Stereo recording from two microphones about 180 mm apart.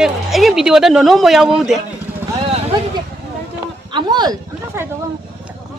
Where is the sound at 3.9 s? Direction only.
25° right (ahead or behind).